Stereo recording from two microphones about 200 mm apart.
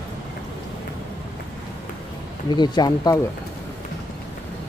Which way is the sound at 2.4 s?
20° left (ahead or behind).